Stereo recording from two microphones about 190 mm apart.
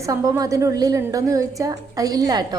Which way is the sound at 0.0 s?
15° right (ahead or behind).